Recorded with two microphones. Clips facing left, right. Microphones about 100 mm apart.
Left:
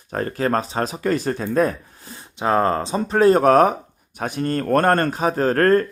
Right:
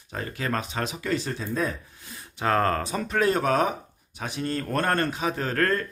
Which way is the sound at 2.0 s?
25° left (ahead or behind).